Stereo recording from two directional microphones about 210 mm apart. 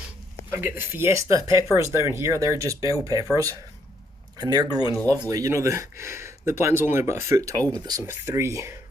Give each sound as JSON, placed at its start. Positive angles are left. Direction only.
{"t": 0.5, "sound": "speech", "side_deg": -10}
{"t": 4.4, "sound": "speech", "side_deg": -20}
{"t": 4.9, "sound": "speech", "side_deg": 5}
{"t": 5.3, "sound": "speech", "side_deg": -15}